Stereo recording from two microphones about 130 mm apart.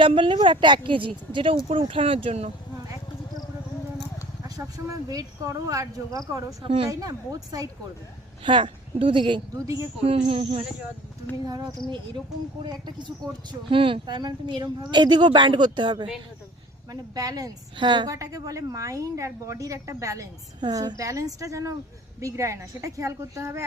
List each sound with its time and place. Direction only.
0.0 s speech: 40° right (ahead or behind)
4.4 s a woman's voice: 25° right (ahead or behind)
8.4 s speech: 40° right (ahead or behind)
11.4 s a woman's voice: 30° right (ahead or behind)
18.1 s a woman's voice: 25° right (ahead or behind)